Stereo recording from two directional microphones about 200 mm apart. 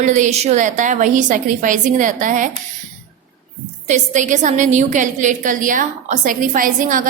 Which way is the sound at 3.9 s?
40° right (ahead or behind).